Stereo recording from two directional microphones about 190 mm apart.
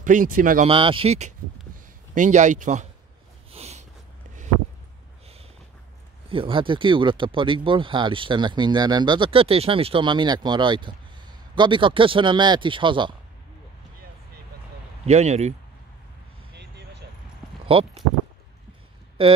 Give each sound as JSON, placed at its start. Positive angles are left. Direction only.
{"t": 0.0, "sound": "speech", "side_deg": -45}
{"t": 0.7, "sound": "speech", "side_deg": -30}
{"t": 3.5, "sound": "a sound", "side_deg": -35}
{"t": 6.2, "sound": "speech", "side_deg": -30}
{"t": 15.0, "sound": "speech", "side_deg": -35}
{"t": 16.5, "sound": "a sound", "side_deg": -65}
{"t": 17.6, "sound": "speech", "side_deg": -30}